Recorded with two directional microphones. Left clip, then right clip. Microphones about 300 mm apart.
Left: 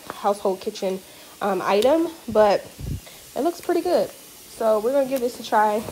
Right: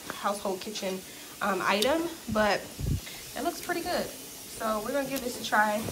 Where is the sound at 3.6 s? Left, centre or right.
Left.